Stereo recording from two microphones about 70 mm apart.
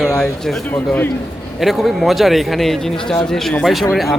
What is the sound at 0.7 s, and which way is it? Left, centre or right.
Speech, left.